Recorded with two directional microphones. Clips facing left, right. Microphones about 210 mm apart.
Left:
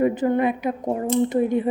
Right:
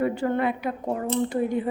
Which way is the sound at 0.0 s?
20° left (ahead or behind).